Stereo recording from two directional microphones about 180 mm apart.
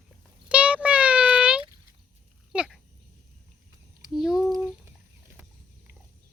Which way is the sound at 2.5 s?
5° right (ahead or behind).